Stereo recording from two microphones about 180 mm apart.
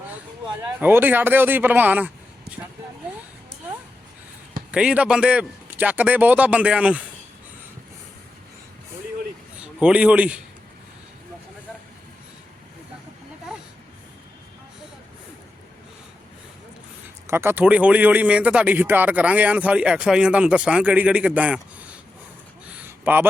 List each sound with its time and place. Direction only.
0.8 s speech: 10° right (ahead or behind)
4.7 s speech: 5° right (ahead or behind)
9.6 s a man's voice: 5° right (ahead or behind)
17.2 s speech: 15° right (ahead or behind)
22.8 s a sound: 10° right (ahead or behind)